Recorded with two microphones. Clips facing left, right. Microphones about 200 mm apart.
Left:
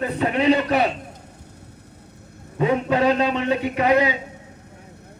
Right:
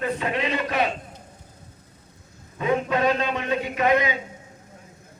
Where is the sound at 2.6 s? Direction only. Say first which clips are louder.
Left 3 dB; 30° left (ahead or behind).